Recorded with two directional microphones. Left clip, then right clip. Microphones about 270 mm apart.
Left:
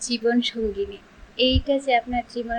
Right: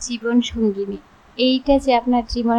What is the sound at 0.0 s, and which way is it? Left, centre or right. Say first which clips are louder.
A woman's voice: right 1 dB; centre.